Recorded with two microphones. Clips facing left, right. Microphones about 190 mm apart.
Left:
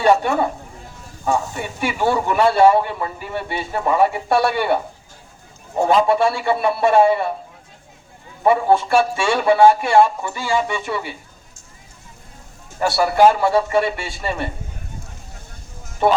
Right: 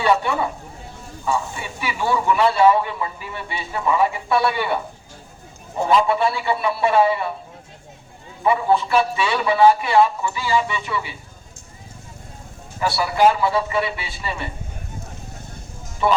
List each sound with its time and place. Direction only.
0.0 s speech: 45° left (ahead or behind)
1.2 s speech: 55° left (ahead or behind)
5.8 s speech: 45° left (ahead or behind)
8.4 s speech: 50° left (ahead or behind)
12.8 s speech: 50° left (ahead or behind)
16.0 s speech: 55° left (ahead or behind)